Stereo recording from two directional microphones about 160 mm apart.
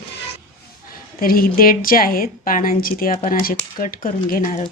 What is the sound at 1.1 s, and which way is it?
Speech, 65° left (ahead or behind).